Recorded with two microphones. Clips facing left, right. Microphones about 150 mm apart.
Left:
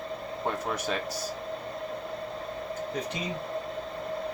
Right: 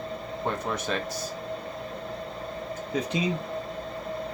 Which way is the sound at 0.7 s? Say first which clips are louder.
Right 1 dB; 10° left (ahead or behind).